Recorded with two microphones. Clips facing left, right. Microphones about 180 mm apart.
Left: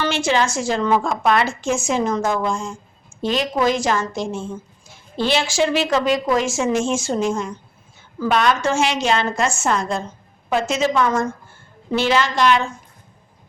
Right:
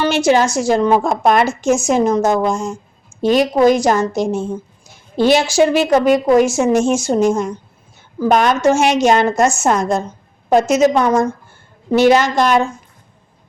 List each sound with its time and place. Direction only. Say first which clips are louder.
0.0 s a woman's voice: right 6 dB; 40° right (ahead or behind); by 6.9 s 65° right (ahead or behind)
6.9 s a woman's voice: right 6 dB; 40° right (ahead or behind)